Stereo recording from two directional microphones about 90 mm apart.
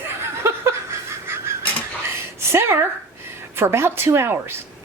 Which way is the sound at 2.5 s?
30° right (ahead or behind).